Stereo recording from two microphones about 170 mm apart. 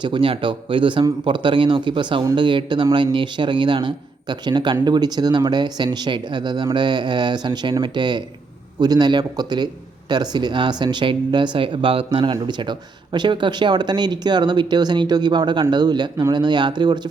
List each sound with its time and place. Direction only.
0.0 s speech: 30° right (ahead or behind)